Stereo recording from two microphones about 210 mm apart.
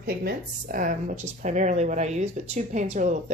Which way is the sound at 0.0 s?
45° right (ahead or behind).